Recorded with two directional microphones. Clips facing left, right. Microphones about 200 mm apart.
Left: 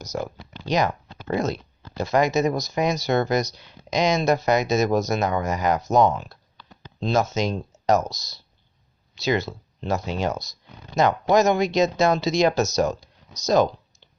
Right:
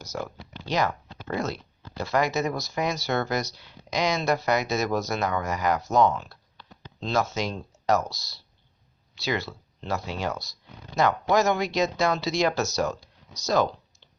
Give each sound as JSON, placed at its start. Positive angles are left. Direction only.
{"t": 0.0, "sound": "speech", "side_deg": 20}